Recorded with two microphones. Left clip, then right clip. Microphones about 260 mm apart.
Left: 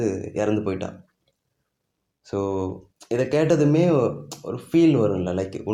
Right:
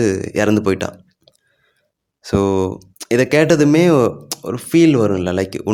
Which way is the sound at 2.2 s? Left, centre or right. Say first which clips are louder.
Right 9 dB; right.